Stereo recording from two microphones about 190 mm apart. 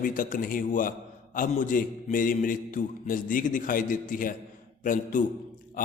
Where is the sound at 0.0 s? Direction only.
45° left (ahead or behind).